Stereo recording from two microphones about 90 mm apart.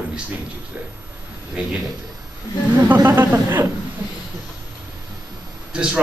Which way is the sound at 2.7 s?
25° right (ahead or behind).